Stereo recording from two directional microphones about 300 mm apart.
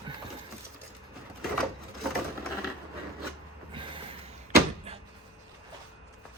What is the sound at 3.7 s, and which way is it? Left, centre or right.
Mechanisms, centre.